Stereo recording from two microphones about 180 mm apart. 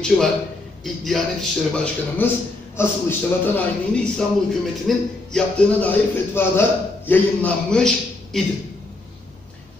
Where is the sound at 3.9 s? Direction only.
5° left (ahead or behind).